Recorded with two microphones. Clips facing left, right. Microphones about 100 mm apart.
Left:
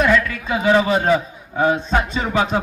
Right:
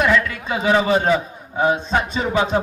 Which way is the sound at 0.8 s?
25° right (ahead or behind).